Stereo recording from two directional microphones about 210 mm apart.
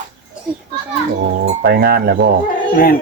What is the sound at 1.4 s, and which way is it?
Speech, 50° right (ahead or behind).